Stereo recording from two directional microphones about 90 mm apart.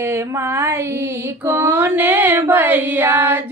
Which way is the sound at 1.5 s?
30° right (ahead or behind).